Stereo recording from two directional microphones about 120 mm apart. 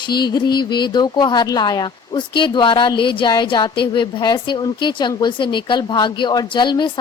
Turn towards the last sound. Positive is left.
turn(degrees=40)  # may be behind; listen again after turning